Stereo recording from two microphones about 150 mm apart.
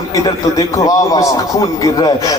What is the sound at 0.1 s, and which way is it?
A man's voice, 25° left (ahead or behind).